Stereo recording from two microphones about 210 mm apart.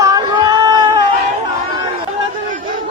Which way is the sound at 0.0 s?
20° right (ahead or behind).